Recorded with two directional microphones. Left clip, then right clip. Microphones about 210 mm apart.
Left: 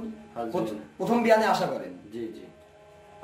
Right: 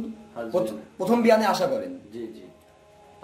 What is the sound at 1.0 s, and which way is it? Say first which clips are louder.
Speech: right 2 dB; 25° right (ahead or behind).